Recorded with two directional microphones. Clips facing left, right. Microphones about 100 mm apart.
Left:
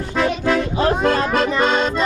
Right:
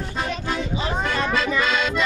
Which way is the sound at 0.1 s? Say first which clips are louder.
Left 10 dB; 75° left (ahead or behind).